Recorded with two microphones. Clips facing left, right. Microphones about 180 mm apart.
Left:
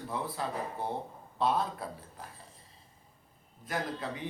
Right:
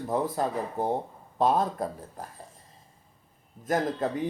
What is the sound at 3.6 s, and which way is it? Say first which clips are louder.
Speech: right 9 dB; 45° right (ahead or behind).